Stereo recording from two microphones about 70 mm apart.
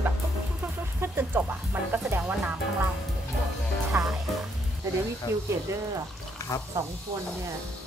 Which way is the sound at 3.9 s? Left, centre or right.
Right.